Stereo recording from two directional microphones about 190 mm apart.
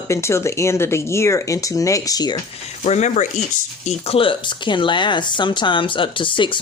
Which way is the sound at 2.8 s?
40° left (ahead or behind).